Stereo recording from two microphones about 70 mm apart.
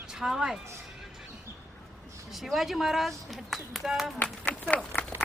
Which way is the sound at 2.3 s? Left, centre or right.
Centre.